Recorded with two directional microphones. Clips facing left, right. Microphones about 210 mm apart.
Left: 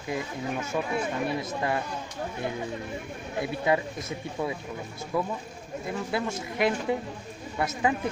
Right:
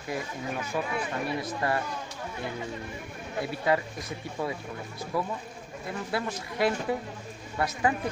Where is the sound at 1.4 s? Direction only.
20° left (ahead or behind).